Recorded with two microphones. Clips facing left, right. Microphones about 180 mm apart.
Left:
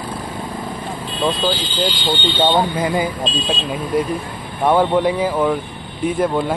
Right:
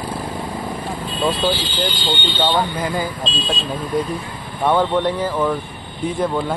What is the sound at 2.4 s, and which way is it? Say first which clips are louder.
Speech: left 3 dB; 20° left (ahead or behind).